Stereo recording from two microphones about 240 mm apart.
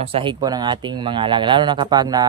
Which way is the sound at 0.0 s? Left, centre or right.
Right.